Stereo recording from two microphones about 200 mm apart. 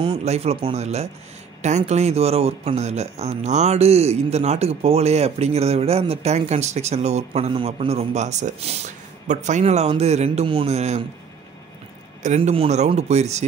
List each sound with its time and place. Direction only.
0.0 s speech: 30° right (ahead or behind)
12.2 s speech: 35° right (ahead or behind)